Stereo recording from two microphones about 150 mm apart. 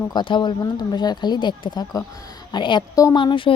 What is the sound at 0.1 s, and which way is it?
A woman's voice, 30° left (ahead or behind).